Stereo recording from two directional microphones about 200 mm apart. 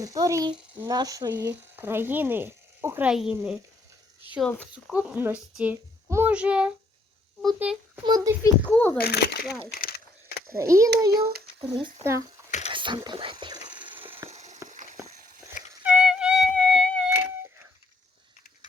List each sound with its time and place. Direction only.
0.0 s a child's voice: 15° right (ahead or behind); by 4.6 s 5° left (ahead or behind)
4.7 s a child's voice: 5° right (ahead or behind)
8.0 s a child's voice: 20° right (ahead or behind)
9.0 s speech: 50° left (ahead or behind)
9.7 s a sound: 50° left (ahead or behind)
10.5 s speech: 15° right (ahead or behind)
12.5 s a sound: 35° left (ahead or behind)
12.7 s whispering: 25° right (ahead or behind)
14.3 s a sound: 35° right (ahead or behind)
15.8 s music: 5° right (ahead or behind)